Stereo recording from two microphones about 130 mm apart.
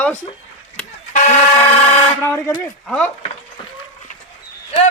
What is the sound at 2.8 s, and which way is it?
Speech, 5° left (ahead or behind).